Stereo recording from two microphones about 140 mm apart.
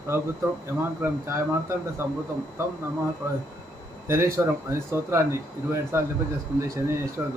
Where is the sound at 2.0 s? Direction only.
20° right (ahead or behind).